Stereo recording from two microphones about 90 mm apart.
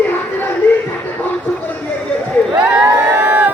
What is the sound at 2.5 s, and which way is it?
Crowd, 10° right (ahead or behind).